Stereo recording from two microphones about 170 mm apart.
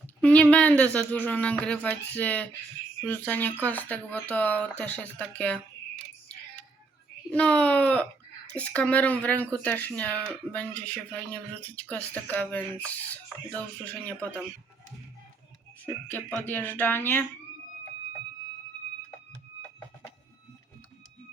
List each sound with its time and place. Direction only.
0.2 s speech: 5° left (ahead or behind)
7.3 s speech: 5° left (ahead or behind)
16.4 s speech: 10° left (ahead or behind)